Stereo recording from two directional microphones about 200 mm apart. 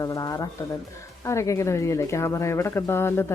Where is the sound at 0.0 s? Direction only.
15° left (ahead or behind).